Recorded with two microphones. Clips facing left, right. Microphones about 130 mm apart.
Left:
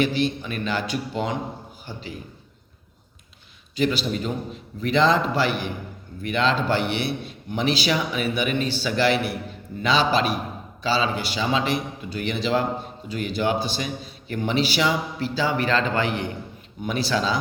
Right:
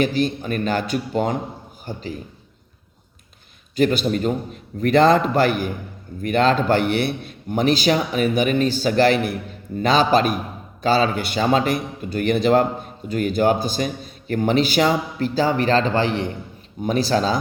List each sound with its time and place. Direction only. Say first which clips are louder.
0.0 s a man's voice: right 2 dB; 45° right (ahead or behind)
3.8 s a man's voice: right 5 dB; 50° right (ahead or behind)